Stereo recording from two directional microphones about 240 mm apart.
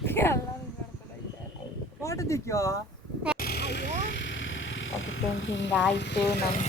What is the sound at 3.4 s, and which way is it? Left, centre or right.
Vehicle, left.